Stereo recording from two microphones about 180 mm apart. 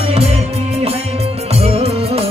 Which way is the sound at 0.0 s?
35° right (ahead or behind).